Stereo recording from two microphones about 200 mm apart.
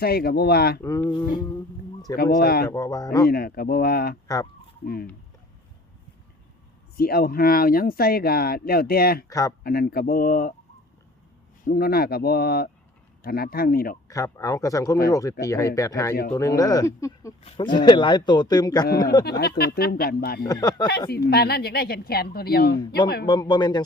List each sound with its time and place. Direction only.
0.0 s speech: 50° left (ahead or behind)
0.8 s speech: 15° left (ahead or behind)
2.1 s speech: 50° left (ahead or behind)
2.6 s speech: 15° left (ahead or behind)
3.2 s speech: 50° left (ahead or behind)
6.9 s speech: 50° left (ahead or behind)
11.6 s speech: 50° left (ahead or behind)
14.1 s a man's voice: 15° left (ahead or behind)
19.2 s speech: 50° left (ahead or behind)
20.4 s a man's voice: 20° left (ahead or behind)
21.2 s speech: 55° left (ahead or behind)
23.2 s a man's voice: 20° left (ahead or behind)